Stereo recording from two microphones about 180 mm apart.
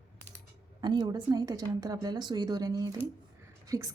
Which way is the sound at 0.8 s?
25° right (ahead or behind).